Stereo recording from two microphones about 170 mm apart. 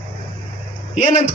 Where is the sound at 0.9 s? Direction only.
45° left (ahead or behind).